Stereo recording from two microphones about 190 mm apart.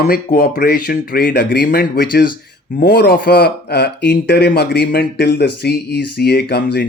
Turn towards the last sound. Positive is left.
turn(degrees=60)  # may be behind; listen again after turning